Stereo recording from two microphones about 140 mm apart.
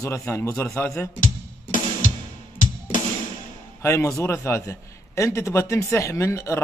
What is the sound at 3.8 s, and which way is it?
A man's voice, 20° left (ahead or behind).